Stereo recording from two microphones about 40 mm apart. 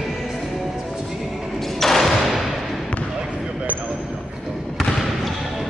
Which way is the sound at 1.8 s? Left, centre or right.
Centre.